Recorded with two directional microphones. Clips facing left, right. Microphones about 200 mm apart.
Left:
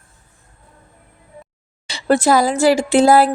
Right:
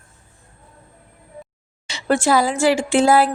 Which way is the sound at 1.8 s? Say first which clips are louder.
Left 3 dB; 35° left (ahead or behind).